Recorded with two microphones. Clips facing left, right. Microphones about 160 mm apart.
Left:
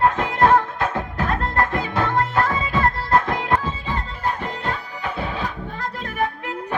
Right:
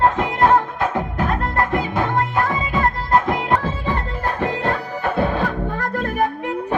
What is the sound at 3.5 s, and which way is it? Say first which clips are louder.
Music: right 3 dB; 60° right (ahead or behind).